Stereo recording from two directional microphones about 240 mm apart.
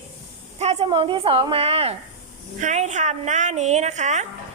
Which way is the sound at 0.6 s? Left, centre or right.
Right.